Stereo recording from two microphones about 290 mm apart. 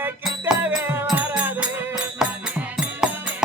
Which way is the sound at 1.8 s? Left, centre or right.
Centre.